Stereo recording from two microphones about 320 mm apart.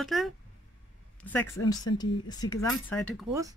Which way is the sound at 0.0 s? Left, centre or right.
Centre.